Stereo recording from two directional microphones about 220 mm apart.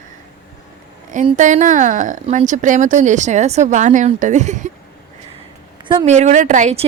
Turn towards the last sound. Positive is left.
turn(degrees=-30)  # may be behind; listen again after turning